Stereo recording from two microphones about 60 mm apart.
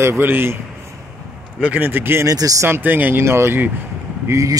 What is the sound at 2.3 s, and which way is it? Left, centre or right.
Speech, right.